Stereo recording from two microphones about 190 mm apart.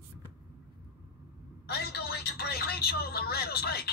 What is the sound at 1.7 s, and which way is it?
Speech, 60° left (ahead or behind).